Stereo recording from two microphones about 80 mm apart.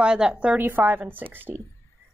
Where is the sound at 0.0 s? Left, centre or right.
Centre.